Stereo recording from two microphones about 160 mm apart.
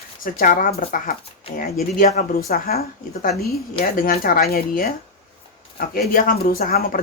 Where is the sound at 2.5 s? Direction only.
70° left (ahead or behind).